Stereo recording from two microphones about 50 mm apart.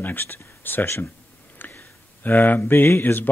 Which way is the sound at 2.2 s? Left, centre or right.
Left.